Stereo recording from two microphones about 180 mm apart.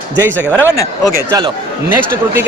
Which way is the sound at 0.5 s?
10° left (ahead or behind).